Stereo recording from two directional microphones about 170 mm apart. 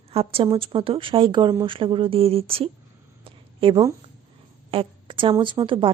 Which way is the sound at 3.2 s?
30° right (ahead or behind).